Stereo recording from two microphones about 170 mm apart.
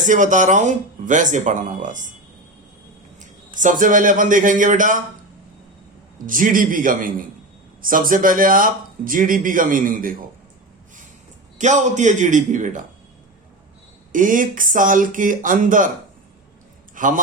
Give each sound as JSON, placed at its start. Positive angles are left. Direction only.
{"t": 0.0, "sound": "speech", "side_deg": -50}
{"t": 3.6, "sound": "speech", "side_deg": -50}
{"t": 6.2, "sound": "speech", "side_deg": -55}
{"t": 11.5, "sound": "speech", "side_deg": -45}
{"t": 14.1, "sound": "speech", "side_deg": -50}
{"t": 16.9, "sound": "speech", "side_deg": -50}